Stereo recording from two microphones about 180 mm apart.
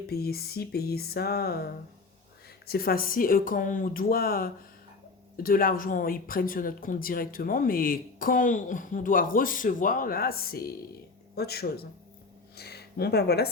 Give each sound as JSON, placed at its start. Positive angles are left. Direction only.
{"t": 0.1, "sound": "music", "side_deg": 60}
{"t": 2.6, "sound": "speech", "side_deg": 55}
{"t": 11.3, "sound": "music", "side_deg": 60}
{"t": 12.5, "sound": "speech", "side_deg": 65}